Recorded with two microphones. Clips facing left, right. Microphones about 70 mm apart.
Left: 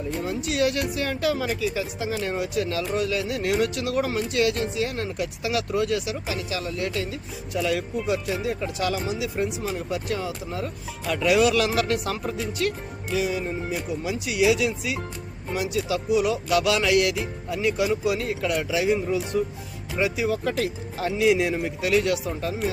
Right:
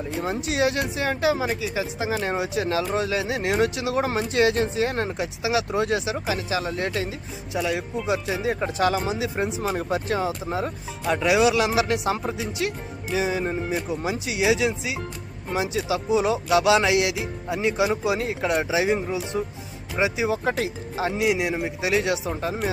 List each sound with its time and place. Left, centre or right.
0.3 s speech: right
5.1 s speech: right
7.6 s speech: centre
8.6 s speech: right
9.6 s speech: right
9.9 s speech: right
11.1 s speech: right
12.1 s speech: right
20.4 s speech: right
21.2 s speech: centre; by 22.5 s right